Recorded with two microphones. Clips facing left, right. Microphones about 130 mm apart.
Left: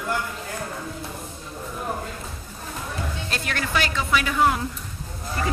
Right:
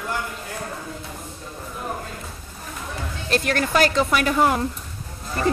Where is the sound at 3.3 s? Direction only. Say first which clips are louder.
Right 7 dB; 45° right (ahead or behind).